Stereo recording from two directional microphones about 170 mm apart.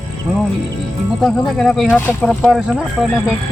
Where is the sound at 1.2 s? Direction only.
Centre (ahead or behind).